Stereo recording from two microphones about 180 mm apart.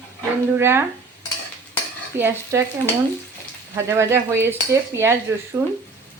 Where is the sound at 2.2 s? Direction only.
10° right (ahead or behind).